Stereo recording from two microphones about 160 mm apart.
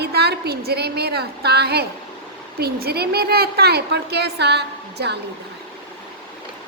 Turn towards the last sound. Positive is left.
turn(degrees=-90)